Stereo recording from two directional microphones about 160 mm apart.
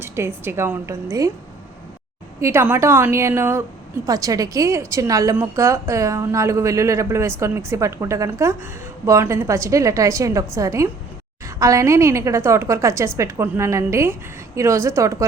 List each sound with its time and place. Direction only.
0.0 s a woman's voice: 15° right (ahead or behind)
2.4 s a woman's voice: 15° right (ahead or behind)